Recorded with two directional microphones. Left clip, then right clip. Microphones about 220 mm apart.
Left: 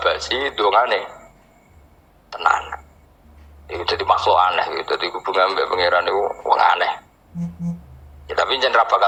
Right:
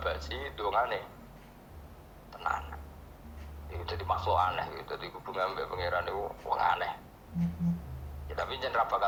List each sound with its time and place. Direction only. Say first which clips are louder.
0.0 s speech: left 16 dB; 50° left (ahead or behind)
2.3 s a sound: left 16 dB; 50° left (ahead or behind)
3.7 s speech: left 16 dB; 50° left (ahead or behind)
8.3 s speech: left 16 dB; 50° left (ahead or behind)